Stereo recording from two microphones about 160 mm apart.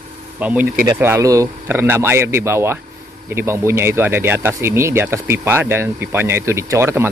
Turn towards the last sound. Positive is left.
turn(degrees=-15)  # may be behind; listen again after turning